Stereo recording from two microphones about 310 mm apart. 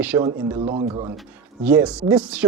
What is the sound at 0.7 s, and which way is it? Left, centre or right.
Speech, centre.